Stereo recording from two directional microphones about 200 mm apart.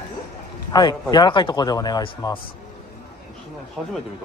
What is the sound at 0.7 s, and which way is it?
Speech, 20° left (ahead or behind).